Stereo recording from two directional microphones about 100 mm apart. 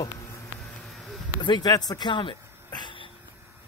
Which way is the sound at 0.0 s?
30° left (ahead or behind).